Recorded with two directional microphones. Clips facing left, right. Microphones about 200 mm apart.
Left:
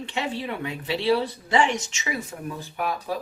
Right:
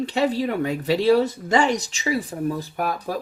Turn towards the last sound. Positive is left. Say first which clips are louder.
# right 2 dB
turn(degrees=-45)  # may be behind; listen again after turning